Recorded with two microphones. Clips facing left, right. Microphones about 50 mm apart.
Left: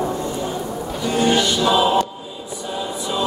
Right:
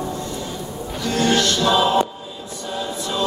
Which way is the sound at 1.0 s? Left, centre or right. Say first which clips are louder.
Left 1 dB; centre.